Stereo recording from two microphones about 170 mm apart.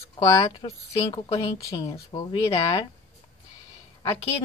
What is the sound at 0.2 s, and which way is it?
Speech, 20° left (ahead or behind).